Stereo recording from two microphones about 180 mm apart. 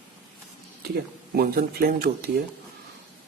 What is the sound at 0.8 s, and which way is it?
Speech, 60° right (ahead or behind).